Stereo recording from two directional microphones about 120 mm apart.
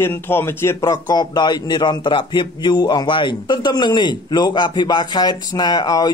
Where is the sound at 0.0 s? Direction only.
20° left (ahead or behind).